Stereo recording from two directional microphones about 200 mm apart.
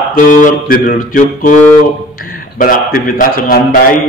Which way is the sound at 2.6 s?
45° left (ahead or behind).